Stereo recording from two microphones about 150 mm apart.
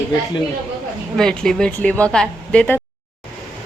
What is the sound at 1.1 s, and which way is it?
A woman's voice, 5° left (ahead or behind).